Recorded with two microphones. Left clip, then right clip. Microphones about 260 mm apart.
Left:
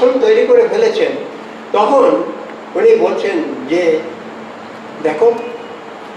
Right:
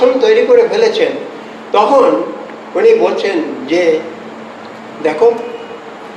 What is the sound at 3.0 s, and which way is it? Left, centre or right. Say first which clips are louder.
Speech: right 1 dB; centre.